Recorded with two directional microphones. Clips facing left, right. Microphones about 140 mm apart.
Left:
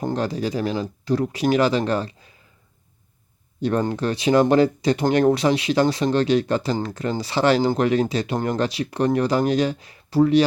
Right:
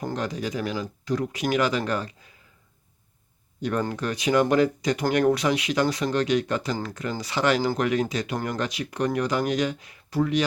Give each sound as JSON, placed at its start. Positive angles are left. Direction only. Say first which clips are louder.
{"t": 0.0, "sound": "speech", "louder": "left 5 dB", "side_deg": 30}
{"t": 3.6, "sound": "speech", "louder": "left 5 dB", "side_deg": 30}